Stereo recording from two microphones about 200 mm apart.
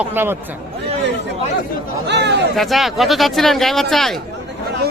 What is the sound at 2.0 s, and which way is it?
Speech, 60° right (ahead or behind).